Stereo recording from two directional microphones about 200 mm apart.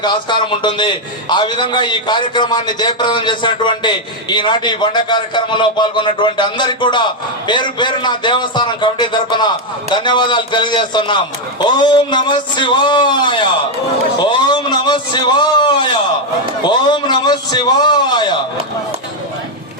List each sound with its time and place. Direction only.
0.0 s a man's voice: 20° left (ahead or behind)